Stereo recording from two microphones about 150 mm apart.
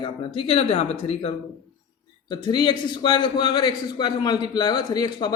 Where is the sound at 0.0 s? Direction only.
35° left (ahead or behind).